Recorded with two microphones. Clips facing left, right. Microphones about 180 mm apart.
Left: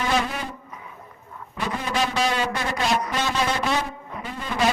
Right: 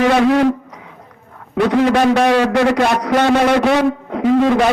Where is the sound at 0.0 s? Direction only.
75° right (ahead or behind).